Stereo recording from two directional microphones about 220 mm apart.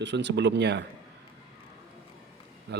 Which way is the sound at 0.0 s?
50° right (ahead or behind).